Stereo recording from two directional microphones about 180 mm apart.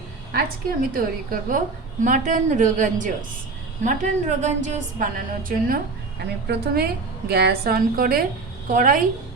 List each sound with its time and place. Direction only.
0.3 s a woman's voice: 50° right (ahead or behind)